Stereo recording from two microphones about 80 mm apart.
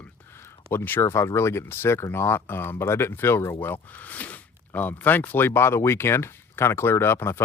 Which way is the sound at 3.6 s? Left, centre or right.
Left.